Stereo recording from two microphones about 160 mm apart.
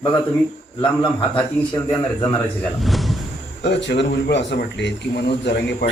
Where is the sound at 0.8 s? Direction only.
30° left (ahead or behind).